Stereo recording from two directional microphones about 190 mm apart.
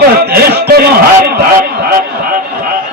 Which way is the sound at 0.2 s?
55° right (ahead or behind).